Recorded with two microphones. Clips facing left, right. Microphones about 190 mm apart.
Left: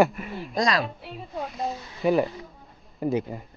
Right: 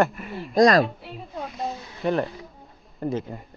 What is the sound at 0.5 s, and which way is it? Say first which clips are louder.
Speech: right 8 dB; 45° right (ahead or behind).